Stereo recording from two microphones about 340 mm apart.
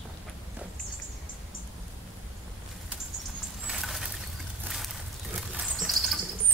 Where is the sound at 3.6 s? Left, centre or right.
Centre.